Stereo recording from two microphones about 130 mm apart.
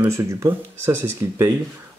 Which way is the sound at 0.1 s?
25° right (ahead or behind).